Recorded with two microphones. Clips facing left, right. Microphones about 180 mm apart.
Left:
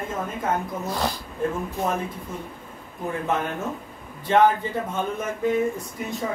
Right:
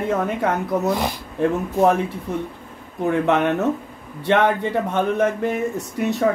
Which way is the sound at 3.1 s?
75° right (ahead or behind).